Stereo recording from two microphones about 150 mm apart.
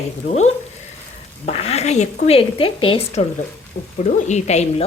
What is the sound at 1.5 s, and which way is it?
A woman's voice, 40° left (ahead or behind).